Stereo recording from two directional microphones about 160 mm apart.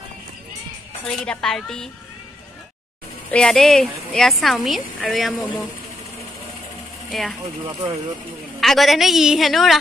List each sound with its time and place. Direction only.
1.0 s a woman's voice: 5° left (ahead or behind)
3.3 s a woman's voice: 5° left (ahead or behind)
7.1 s speech: centre (ahead or behind)
7.4 s speech: 35° right (ahead or behind)
8.5 s a woman's voice: centre (ahead or behind)